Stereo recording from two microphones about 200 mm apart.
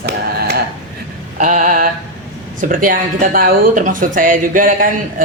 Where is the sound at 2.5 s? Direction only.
40° right (ahead or behind).